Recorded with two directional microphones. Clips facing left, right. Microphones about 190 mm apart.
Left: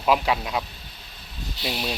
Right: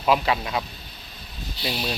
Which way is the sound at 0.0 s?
5° left (ahead or behind).